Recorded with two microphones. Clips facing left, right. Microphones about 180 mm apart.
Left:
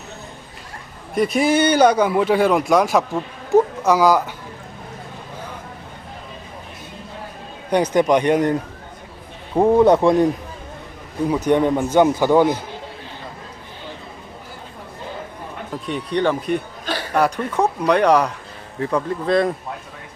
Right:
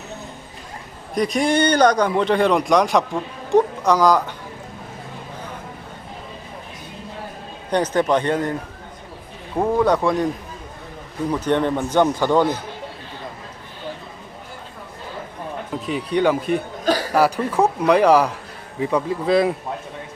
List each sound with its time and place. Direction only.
1.1 s speech: 5° left (ahead or behind)
3.5 s a sound: 5° left (ahead or behind)
7.7 s a man's voice: 10° left (ahead or behind)
9.6 s speech: 20° left (ahead or behind)
11.3 s a man's voice: 10° left (ahead or behind)
15.9 s speech: 10° right (ahead or behind)